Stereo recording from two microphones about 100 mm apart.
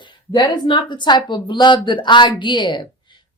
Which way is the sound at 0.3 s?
50° left (ahead or behind).